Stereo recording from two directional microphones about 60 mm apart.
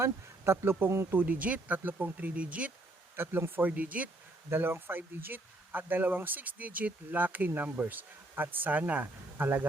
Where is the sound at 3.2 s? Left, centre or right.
Right.